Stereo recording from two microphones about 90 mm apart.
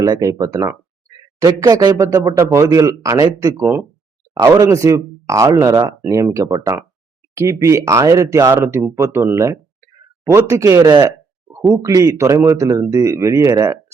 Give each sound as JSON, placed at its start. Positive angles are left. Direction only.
{"t": 0.0, "sound": "speech", "side_deg": -40}